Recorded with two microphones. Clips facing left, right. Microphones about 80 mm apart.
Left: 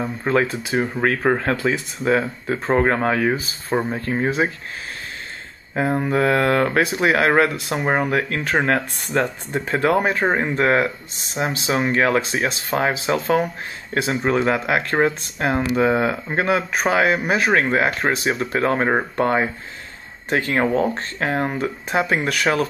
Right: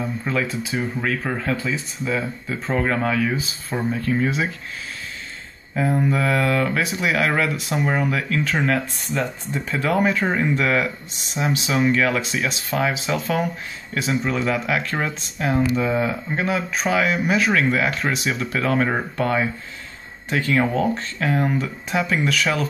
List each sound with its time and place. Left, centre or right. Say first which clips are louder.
0.0 s speech: left 4 dB; left
5.8 s speech: left 2 dB; left